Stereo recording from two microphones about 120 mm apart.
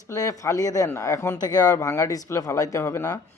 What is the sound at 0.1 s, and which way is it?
Speech, 30° left (ahead or behind).